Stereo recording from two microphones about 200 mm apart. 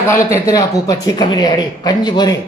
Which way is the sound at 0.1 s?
15° left (ahead or behind).